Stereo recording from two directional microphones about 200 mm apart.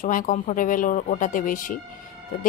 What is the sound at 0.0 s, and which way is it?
A woman's voice, 40° left (ahead or behind).